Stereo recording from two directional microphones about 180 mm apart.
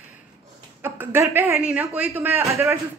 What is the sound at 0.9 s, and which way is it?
Speech, 10° right (ahead or behind).